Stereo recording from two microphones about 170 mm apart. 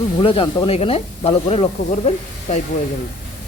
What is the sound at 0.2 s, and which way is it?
Speech, 30° left (ahead or behind).